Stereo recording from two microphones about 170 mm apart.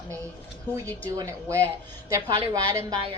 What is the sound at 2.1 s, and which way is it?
Speech, 20° right (ahead or behind).